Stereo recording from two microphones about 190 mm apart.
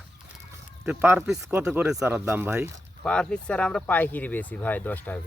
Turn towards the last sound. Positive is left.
turn(degrees=10)  # may be behind; listen again after turning